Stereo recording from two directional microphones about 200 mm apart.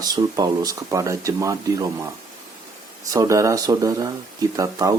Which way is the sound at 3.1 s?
15° right (ahead or behind).